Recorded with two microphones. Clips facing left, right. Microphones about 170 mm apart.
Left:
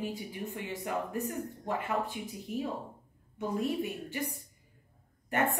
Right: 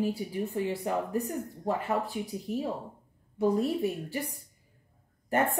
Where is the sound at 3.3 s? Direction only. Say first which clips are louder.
Right 5 dB; 40° right (ahead or behind).